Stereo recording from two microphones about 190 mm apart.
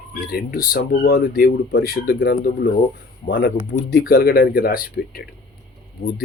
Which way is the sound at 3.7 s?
50° left (ahead or behind).